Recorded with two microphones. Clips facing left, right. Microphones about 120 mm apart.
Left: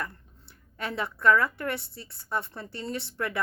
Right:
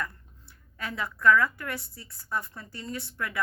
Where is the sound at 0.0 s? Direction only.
25° left (ahead or behind).